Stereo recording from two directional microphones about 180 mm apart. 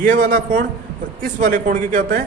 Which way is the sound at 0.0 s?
50° right (ahead or behind).